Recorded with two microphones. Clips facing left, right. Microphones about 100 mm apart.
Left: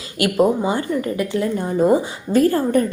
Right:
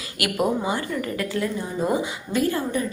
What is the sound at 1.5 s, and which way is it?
Speech, 50° left (ahead or behind).